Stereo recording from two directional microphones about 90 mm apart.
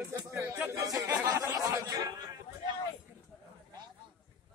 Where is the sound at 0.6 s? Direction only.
30° right (ahead or behind).